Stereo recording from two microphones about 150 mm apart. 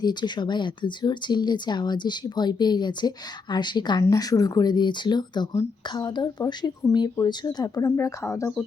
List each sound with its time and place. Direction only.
0.0 s speech: 30° left (ahead or behind)